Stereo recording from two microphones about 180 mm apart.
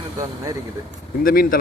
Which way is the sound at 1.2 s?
55° left (ahead or behind).